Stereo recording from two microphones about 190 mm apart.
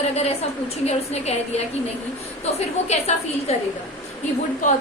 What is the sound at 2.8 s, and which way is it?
Speech, 35° left (ahead or behind).